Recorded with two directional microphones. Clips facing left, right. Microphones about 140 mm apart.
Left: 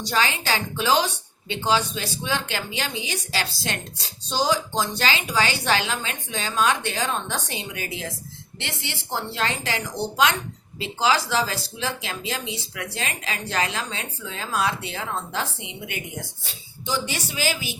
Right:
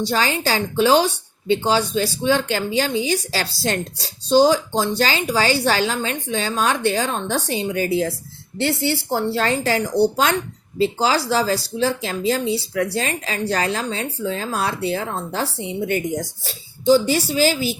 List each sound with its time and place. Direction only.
0.0 s a woman's voice: 35° right (ahead or behind)